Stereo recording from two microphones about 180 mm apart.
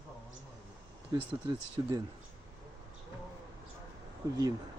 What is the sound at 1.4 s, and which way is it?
Speech, 15° right (ahead or behind).